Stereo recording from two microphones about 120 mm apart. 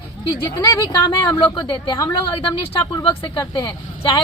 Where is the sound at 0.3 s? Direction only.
35° left (ahead or behind).